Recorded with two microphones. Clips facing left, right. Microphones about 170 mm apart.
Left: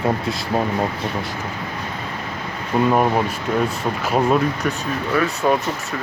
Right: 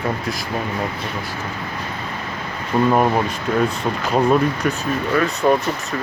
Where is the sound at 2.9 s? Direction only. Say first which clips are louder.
Right 1 dB; centre (ahead or behind).